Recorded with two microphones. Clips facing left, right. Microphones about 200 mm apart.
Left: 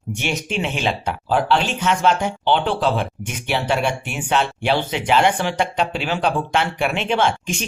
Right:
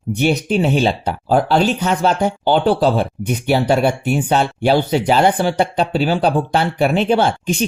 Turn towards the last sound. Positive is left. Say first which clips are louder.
# right 4 dB
turn(degrees=-35)  # may be behind; listen again after turning